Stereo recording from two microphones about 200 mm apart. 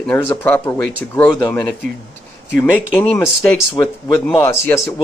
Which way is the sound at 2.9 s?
10° left (ahead or behind).